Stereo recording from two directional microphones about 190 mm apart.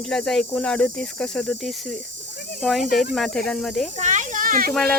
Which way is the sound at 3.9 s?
40° right (ahead or behind).